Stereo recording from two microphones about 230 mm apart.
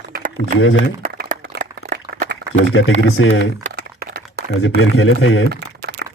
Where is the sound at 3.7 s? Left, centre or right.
Right.